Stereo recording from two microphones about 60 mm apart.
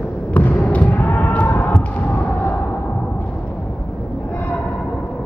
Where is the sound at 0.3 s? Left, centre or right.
Left.